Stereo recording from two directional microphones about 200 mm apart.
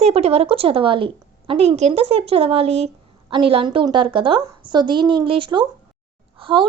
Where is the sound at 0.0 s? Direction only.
30° right (ahead or behind).